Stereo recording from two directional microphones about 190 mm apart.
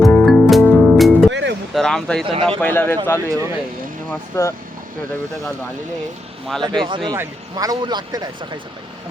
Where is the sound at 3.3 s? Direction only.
15° right (ahead or behind).